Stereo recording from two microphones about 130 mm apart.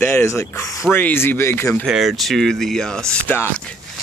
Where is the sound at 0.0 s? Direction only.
15° left (ahead or behind).